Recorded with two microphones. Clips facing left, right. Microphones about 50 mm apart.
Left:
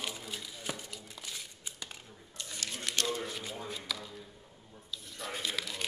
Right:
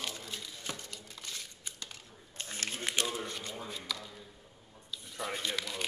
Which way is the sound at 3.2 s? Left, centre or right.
Centre.